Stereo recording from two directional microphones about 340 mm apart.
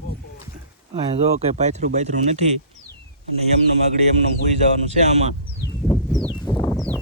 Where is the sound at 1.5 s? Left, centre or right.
Centre.